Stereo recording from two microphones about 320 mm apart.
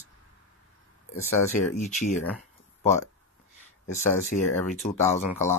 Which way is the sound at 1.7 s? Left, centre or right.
Left.